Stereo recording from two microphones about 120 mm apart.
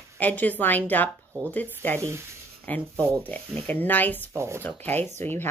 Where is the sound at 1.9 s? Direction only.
25° right (ahead or behind).